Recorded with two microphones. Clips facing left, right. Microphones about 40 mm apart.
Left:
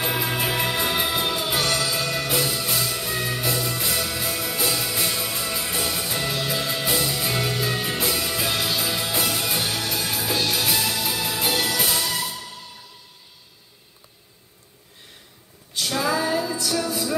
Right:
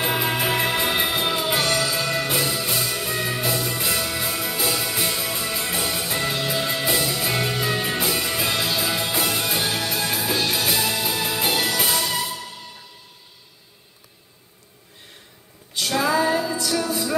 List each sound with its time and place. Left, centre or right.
0.0 s music: centre
15.8 s music: right
16.6 s music: centre